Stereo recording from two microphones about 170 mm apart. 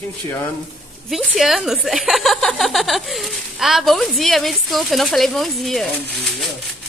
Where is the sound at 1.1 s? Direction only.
Centre (ahead or behind).